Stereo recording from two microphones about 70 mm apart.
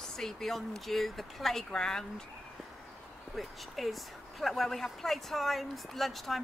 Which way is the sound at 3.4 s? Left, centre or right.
Centre.